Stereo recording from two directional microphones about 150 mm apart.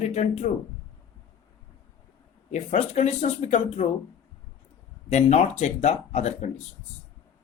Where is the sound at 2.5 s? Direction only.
50° left (ahead or behind).